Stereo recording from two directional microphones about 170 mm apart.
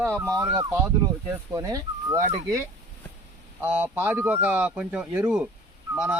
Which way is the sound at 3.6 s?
10° right (ahead or behind).